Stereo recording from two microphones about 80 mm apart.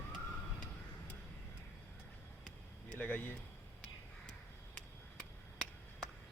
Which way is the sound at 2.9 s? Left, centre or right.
Centre.